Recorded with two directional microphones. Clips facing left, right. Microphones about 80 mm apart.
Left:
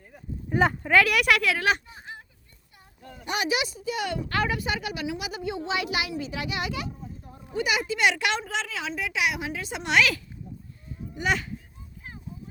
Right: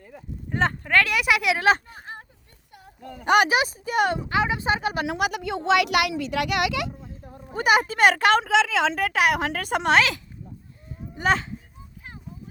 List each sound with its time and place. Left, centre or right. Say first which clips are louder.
0.5 s speech: left 1 dB; centre
1.1 s a woman's voice: even; centre
1.4 s speech: right 2 dB; centre
1.9 s a sound: right 3 dB; right
2.7 s a child's voice: right 6 dB; right
4.3 s speech: right 3 dB; centre
4.6 s speech: right 6 dB; right
5.0 s speech: right 5 dB; right
7.5 s a woman's voice: right 6 dB; right
8.4 s a woman's voice: right 11 dB; right
9.0 s a woman's voice: right 6 dB; right
9.9 s speech: right 1 dB; right